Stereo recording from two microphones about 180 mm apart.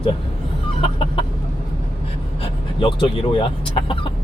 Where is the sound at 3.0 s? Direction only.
30° left (ahead or behind).